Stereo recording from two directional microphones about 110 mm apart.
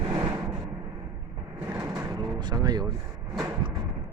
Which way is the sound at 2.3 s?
40° right (ahead or behind).